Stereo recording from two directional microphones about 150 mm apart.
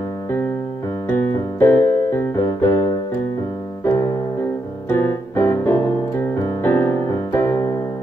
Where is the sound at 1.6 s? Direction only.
15° left (ahead or behind).